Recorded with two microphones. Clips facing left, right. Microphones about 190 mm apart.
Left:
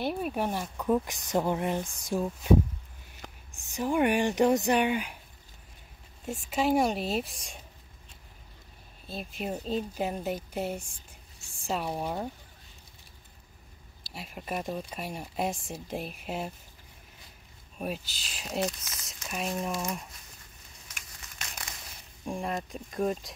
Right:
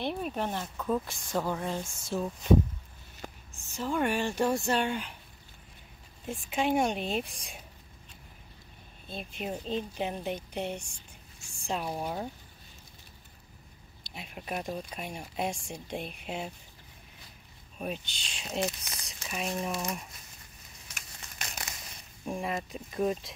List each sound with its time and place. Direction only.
0.0 s speech: 5° left (ahead or behind)
3.2 s a sound: 5° right (ahead or behind)
3.6 s speech: 15° left (ahead or behind)
6.2 s speech: 45° left (ahead or behind)
6.5 s speech: centre (ahead or behind)
9.0 s speech: 5° left (ahead or behind)
14.0 s speech: centre (ahead or behind)
17.7 s speech: 5° left (ahead or behind)
22.2 s speech: centre (ahead or behind)